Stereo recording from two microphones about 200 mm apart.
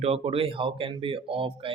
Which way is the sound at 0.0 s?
30° right (ahead or behind).